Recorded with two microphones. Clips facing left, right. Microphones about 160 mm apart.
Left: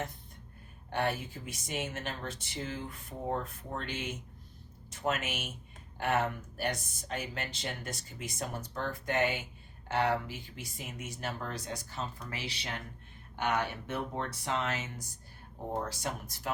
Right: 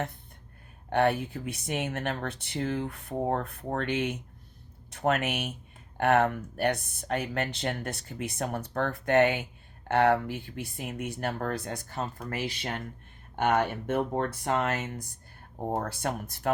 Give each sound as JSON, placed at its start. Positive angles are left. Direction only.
{"t": 0.9, "sound": "speech", "side_deg": -60}